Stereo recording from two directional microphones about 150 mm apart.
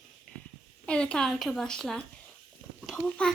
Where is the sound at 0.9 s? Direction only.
5° left (ahead or behind).